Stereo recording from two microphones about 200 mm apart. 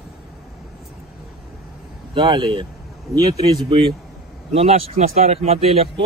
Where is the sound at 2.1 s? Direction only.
25° right (ahead or behind).